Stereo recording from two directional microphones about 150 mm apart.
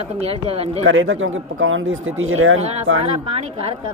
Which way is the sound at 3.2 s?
40° right (ahead or behind).